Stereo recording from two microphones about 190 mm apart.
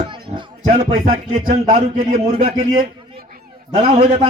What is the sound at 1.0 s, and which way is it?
A man's voice, 45° right (ahead or behind).